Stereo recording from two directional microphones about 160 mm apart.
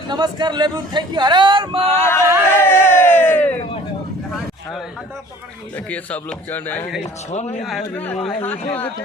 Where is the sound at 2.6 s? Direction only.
15° left (ahead or behind).